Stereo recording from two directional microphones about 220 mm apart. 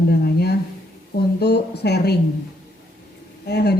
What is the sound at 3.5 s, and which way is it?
Speech, 50° left (ahead or behind).